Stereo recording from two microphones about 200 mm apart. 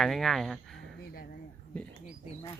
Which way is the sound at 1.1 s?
45° left (ahead or behind).